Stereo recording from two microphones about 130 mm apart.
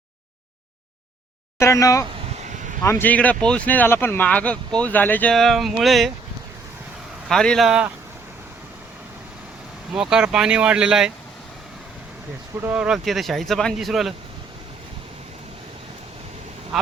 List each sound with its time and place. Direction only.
1.5 s speech: 25° left (ahead or behind)
2.3 s vehicle: 70° right (ahead or behind)
2.8 s speech: 15° left (ahead or behind)
5.3 s speech: centre (ahead or behind)
7.3 s speech: 5° left (ahead or behind)
9.9 s speech: 5° right (ahead or behind)
12.6 s speech: 10° right (ahead or behind)
16.7 s quack: centre (ahead or behind)